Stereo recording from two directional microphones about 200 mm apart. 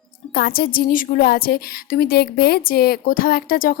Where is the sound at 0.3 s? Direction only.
50° left (ahead or behind).